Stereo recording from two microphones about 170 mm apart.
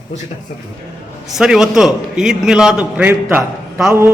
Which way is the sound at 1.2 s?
5° right (ahead or behind).